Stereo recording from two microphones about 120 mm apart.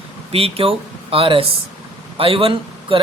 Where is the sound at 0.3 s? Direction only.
55° right (ahead or behind).